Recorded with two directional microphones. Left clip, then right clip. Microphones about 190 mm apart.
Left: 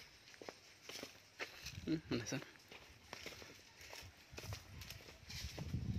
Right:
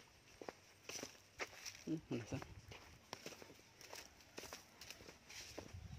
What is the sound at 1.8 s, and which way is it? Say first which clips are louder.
Speech: left 5 dB; 15° left (ahead or behind).